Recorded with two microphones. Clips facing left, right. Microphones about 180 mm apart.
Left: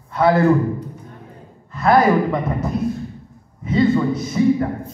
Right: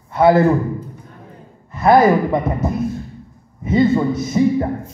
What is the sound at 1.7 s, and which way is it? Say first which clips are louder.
A woman's voice: right 3 dB; 20° right (ahead or behind).